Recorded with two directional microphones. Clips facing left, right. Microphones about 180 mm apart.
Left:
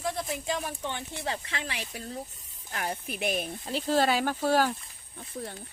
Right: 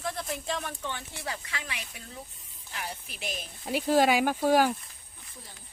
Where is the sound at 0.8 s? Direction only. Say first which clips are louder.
Left 3 dB; 20° left (ahead or behind); by 2.2 s 35° left (ahead or behind).